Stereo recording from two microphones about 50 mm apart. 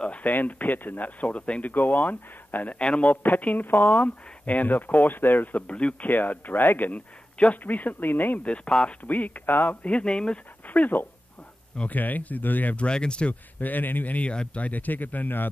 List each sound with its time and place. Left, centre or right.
0.0 s speech: left
0.3 s speech: left
1.7 s speech: left
5.7 s speech: left
6.0 s speech: left
6.9 s a man's voice: left
7.6 s speech: left
8.5 s speech: centre
9.0 s speech: left
9.8 s speech: left
10.7 s speech: left
12.7 s speech: centre
13.3 s speech: left
14.6 s speech: left